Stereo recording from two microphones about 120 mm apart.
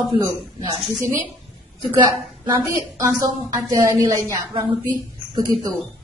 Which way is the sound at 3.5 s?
30° right (ahead or behind).